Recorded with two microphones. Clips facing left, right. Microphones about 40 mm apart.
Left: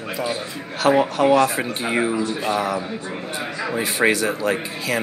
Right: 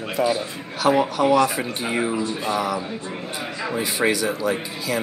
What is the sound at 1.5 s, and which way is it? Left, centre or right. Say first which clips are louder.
Speech: left 2 dB; centre.